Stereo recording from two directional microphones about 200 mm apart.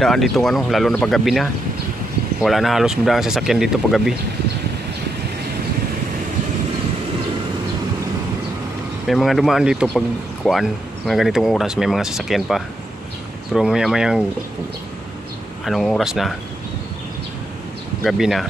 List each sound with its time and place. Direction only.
0.0 s speech: centre (ahead or behind)
9.0 s speech: centre (ahead or behind)
15.6 s speech: centre (ahead or behind)
18.0 s speech: centre (ahead or behind)